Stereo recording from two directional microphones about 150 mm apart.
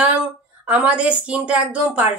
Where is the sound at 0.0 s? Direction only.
10° right (ahead or behind).